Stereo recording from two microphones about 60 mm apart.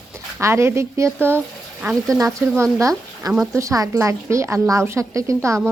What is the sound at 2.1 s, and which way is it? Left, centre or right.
A woman's voice, right.